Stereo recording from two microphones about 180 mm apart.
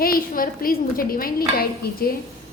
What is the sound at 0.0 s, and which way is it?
A woman's voice, 55° left (ahead or behind).